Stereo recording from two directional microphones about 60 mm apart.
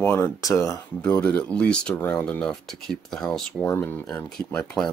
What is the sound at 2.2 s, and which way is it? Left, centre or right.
Speech, centre.